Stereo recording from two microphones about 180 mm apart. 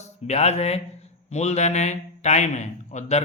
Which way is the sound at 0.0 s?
40° left (ahead or behind).